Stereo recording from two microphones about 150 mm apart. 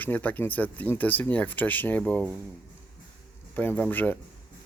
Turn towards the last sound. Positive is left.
turn(degrees=10)  # may be behind; listen again after turning